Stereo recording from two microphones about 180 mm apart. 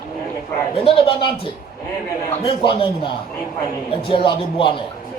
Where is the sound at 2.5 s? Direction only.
30° left (ahead or behind).